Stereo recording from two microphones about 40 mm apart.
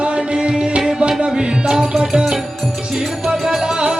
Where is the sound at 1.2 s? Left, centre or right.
Right.